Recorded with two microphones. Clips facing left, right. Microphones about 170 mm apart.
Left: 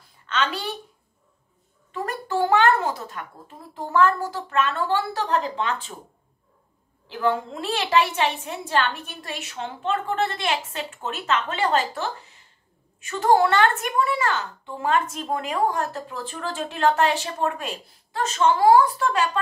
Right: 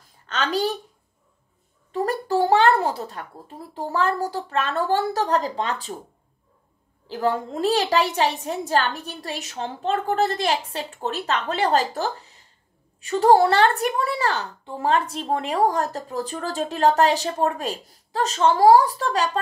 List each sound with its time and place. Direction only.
0.3 s a woman's voice: 40° right (ahead or behind)
1.9 s a child's voice: 35° right (ahead or behind)
7.1 s a woman's voice: 40° right (ahead or behind)